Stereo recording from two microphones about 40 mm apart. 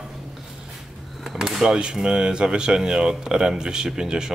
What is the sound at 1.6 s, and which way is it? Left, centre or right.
Speech, right.